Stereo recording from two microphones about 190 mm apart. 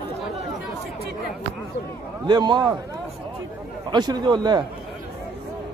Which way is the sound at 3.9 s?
20° right (ahead or behind).